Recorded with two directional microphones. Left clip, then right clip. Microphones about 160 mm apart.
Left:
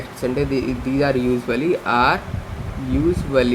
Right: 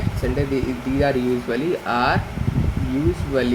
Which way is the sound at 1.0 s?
50° left (ahead or behind).